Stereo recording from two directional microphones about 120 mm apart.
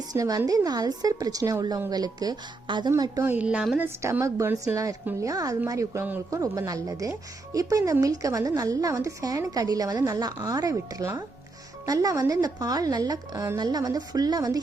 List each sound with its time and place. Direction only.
0.1 s a woman's voice: 30° right (ahead or behind)
3.2 s a woman's voice: 10° right (ahead or behind)
3.8 s a woman's voice: 20° right (ahead or behind)